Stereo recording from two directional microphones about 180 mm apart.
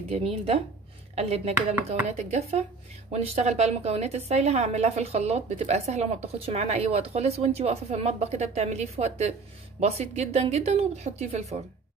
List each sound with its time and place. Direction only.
0.1 s a woman's voice: 35° right (ahead or behind)